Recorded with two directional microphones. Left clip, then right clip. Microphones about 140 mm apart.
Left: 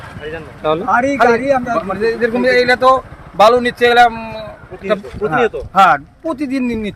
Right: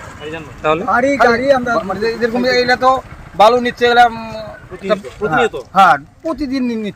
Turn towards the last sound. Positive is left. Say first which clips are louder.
# even
turn(degrees=10)  # may be behind; listen again after turning